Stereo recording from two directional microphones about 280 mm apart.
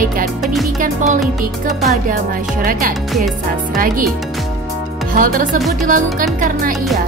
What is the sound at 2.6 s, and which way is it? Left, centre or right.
Speech, right.